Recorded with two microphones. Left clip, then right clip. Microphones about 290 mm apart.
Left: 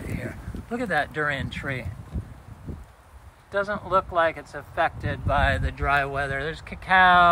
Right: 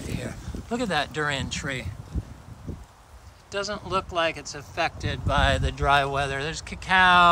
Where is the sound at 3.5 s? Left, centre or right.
Centre.